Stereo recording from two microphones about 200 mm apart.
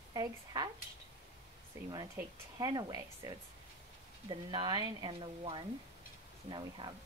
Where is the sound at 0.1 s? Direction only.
20° right (ahead or behind).